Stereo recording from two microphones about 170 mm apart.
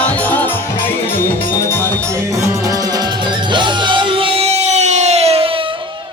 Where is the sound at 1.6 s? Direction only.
15° left (ahead or behind).